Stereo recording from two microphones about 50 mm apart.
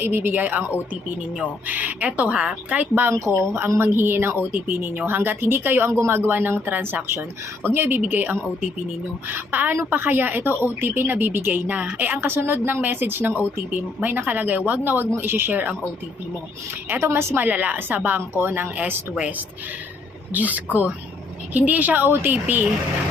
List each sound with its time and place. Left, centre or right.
0.0 s speech: right
1.6 s a woman's voice: right
3.1 s speech: right
3.9 s a woman's voice: right
12.2 s a woman's voice: right
15.2 s speech: right
17.0 s speech: right
17.3 s a woman's voice: right
20.3 s a woman's voice: right